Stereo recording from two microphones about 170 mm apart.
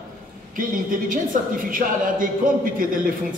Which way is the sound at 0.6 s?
55° right (ahead or behind).